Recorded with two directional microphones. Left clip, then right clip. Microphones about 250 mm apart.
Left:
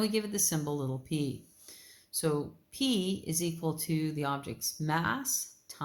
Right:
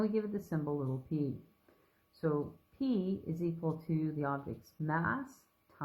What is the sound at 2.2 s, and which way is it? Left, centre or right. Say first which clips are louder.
A woman's voice: left 3 dB; left.